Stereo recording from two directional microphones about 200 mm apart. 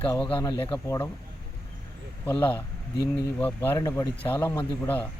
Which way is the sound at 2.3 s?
10° left (ahead or behind).